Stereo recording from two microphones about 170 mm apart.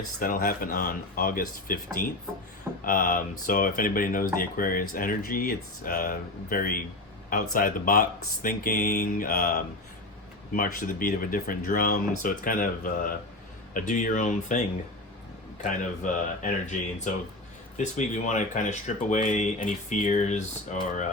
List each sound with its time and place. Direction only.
0.2 s speech: 55° left (ahead or behind)
15.6 s speech: 50° left (ahead or behind)